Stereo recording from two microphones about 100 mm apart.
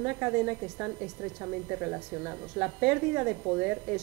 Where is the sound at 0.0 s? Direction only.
15° right (ahead or behind).